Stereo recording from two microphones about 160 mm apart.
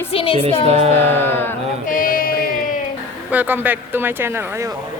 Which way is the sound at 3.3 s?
10° right (ahead or behind).